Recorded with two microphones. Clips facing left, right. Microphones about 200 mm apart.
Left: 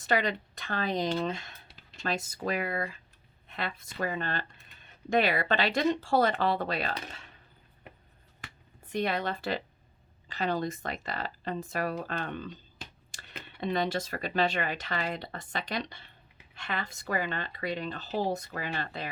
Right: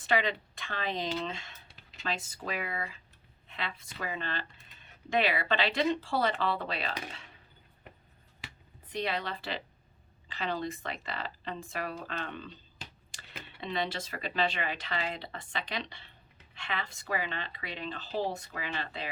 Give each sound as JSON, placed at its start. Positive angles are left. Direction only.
{"t": 0.0, "sound": "speech", "side_deg": 40}
{"t": 8.9, "sound": "speech", "side_deg": 50}
{"t": 13.6, "sound": "speech", "side_deg": 45}